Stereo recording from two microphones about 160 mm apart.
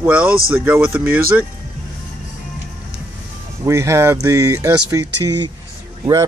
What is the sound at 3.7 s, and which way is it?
Speech, 15° right (ahead or behind).